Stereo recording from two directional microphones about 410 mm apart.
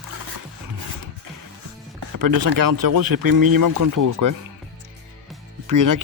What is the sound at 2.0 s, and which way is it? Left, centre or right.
Speech, right.